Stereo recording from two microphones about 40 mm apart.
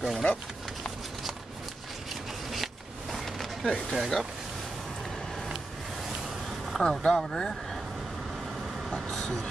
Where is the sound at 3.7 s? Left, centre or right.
Centre.